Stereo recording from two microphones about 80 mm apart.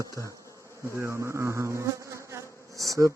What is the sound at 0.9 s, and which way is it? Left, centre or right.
Insect, right.